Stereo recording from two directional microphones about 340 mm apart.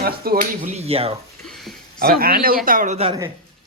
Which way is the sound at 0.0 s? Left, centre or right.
Right.